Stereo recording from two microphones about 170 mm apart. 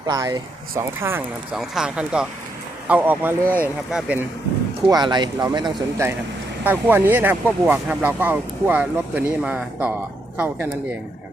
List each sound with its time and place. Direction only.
0.1 s speech: 20° right (ahead or behind)
1.5 s speech: 5° right (ahead or behind)
4.9 s speech: 25° right (ahead or behind)
6.7 s speech: 10° right (ahead or behind)